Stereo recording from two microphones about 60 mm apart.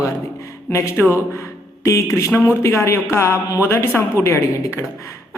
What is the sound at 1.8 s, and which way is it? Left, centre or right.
A man's voice, left.